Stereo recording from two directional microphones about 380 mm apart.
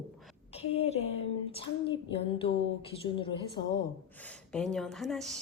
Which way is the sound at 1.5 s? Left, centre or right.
Centre.